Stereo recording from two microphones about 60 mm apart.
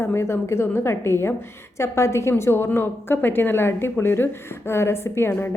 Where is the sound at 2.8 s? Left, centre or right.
Left.